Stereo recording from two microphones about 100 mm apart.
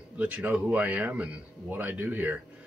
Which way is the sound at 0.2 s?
15° right (ahead or behind).